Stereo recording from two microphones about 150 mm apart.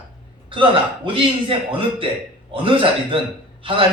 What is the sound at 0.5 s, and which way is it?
A man's voice, 35° right (ahead or behind).